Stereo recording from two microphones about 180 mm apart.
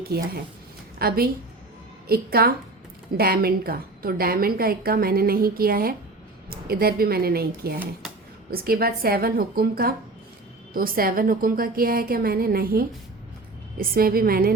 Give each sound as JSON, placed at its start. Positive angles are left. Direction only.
{"t": 0.1, "sound": "a woman's voice", "side_deg": -60}